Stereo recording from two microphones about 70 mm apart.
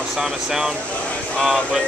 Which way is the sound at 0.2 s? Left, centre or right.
Centre.